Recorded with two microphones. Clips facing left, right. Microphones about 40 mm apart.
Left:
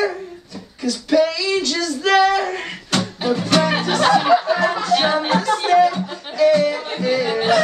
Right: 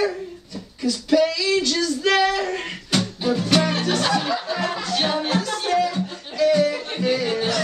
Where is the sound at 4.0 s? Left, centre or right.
Left.